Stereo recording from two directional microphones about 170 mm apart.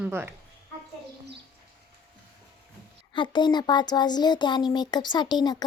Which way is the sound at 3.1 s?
25° left (ahead or behind).